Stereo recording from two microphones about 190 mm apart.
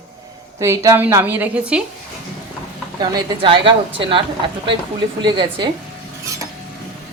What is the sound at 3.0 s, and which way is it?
A woman's voice, 25° right (ahead or behind).